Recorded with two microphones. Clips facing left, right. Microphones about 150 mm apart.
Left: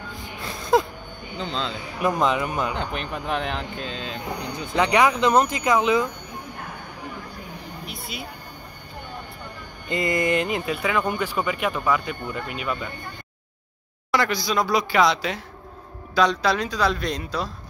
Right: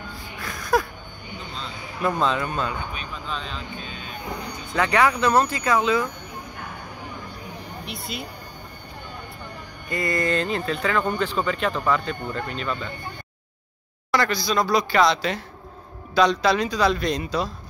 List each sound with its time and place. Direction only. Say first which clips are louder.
0.4 s wheeze: left 2 dB; 25° left (ahead or behind)
1.4 s a sound: left 9 dB; 90° left
2.0 s speech: left 1 dB; 15° left (ahead or behind)
2.7 s speech: left 4 dB; 75° left (ahead or behind); by 4.2 s 90° left
4.4 s speech: left 2 dB; 20° left (ahead or behind)
7.8 s speech: right 3 dB; centre (ahead or behind)
9.8 s speech: left 2 dB; 20° left (ahead or behind)
14.1 s speech: even; 10° left (ahead or behind)